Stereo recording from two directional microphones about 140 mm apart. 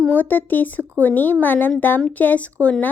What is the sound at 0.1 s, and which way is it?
Speech, 10° left (ahead or behind).